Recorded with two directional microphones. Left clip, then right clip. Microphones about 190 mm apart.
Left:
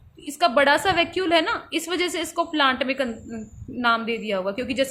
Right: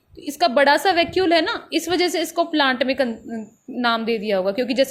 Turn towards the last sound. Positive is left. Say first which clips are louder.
# right 5 dB
turn(degrees=-15)  # may be behind; listen again after turning